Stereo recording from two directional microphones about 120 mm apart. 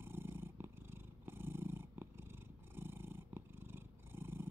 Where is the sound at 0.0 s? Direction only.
20° right (ahead or behind).